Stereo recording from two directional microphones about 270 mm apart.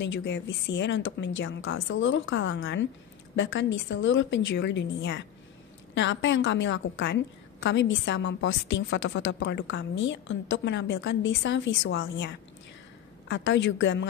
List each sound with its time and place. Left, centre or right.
0.0 s a woman's voice: left